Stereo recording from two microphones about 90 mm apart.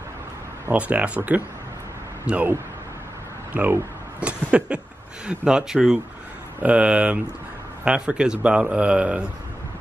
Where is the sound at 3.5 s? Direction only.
20° right (ahead or behind).